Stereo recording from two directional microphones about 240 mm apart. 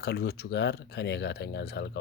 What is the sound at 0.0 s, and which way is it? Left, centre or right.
Speech, left.